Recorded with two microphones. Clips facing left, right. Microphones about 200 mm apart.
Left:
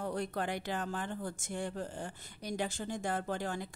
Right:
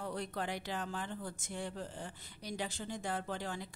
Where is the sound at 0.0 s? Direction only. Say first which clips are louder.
Left 4 dB; 50° left (ahead or behind).